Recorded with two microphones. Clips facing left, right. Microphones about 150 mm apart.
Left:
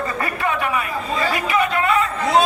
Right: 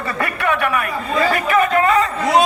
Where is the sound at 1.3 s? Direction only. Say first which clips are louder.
Right 4 dB; 45° right (ahead or behind).